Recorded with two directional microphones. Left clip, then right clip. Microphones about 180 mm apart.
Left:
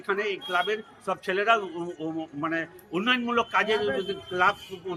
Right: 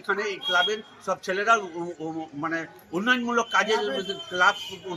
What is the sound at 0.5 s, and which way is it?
A man's voice, centre (ahead or behind).